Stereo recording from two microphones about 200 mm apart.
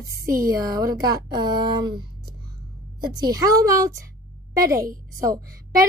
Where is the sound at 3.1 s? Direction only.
20° right (ahead or behind).